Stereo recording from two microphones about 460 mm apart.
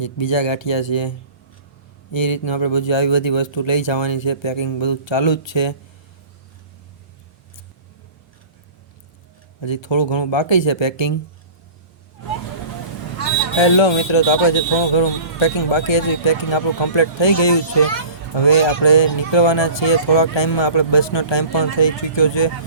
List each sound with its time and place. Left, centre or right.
0.0 s speech: left
2.1 s speech: left
9.6 s speech: left
13.6 s speech: left